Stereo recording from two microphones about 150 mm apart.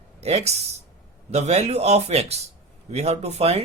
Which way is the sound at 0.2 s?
45° right (ahead or behind).